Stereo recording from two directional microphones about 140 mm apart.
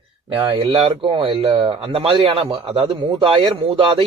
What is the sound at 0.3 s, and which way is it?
Speech, 30° right (ahead or behind).